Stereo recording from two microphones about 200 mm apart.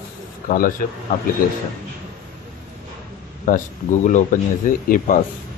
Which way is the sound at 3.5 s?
40° left (ahead or behind).